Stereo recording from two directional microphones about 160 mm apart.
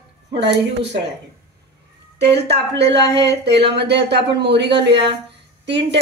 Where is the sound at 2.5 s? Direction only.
90° right.